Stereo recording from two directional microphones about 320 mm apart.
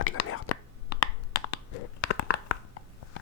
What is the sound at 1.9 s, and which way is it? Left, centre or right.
Tearing, left.